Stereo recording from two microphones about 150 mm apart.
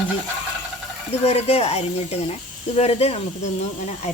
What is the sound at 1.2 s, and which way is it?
Speech, 45° left (ahead or behind).